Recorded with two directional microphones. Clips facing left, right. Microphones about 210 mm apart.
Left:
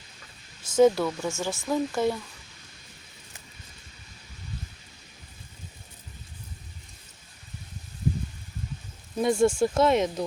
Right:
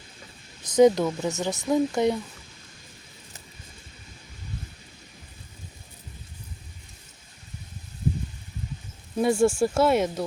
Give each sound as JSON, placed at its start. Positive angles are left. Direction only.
{"t": 0.8, "sound": "speech", "side_deg": -15}
{"t": 9.1, "sound": "speech", "side_deg": -5}